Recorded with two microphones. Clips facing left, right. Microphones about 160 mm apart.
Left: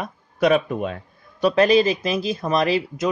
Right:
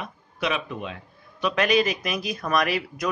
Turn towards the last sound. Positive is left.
turn(degrees=25)  # may be behind; listen again after turning